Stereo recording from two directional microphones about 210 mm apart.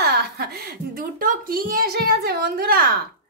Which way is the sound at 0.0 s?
50° right (ahead or behind).